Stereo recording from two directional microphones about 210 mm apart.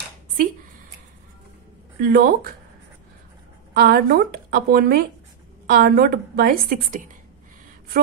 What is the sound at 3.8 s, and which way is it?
Speech, 45° right (ahead or behind).